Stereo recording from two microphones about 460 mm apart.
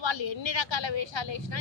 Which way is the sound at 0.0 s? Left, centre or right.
Left.